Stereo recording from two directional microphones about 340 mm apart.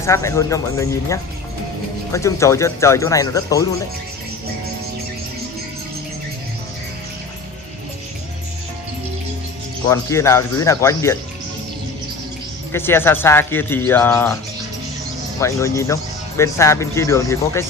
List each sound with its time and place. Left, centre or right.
0.0 s speech: centre
9.8 s speech: centre
12.7 s speech: centre
15.4 s speech: centre